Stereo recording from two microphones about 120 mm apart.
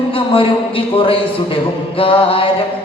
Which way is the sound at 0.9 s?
50° left (ahead or behind).